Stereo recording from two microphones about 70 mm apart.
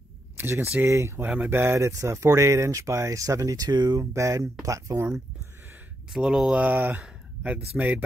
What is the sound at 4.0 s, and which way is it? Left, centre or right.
Speech, right.